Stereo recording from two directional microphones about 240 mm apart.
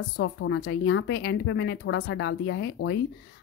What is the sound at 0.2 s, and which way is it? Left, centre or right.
A woman's voice, left.